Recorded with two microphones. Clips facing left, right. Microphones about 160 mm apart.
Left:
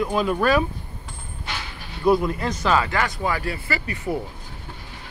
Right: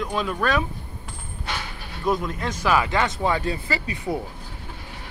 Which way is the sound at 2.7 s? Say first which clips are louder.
Even; 20° right (ahead or behind).